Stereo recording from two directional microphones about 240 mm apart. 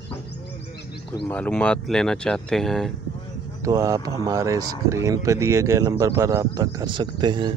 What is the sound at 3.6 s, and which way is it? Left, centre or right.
Speech, centre.